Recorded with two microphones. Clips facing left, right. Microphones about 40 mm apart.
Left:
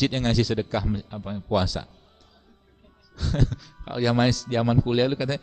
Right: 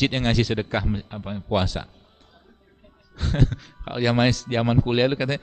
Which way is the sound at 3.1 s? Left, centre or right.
Right.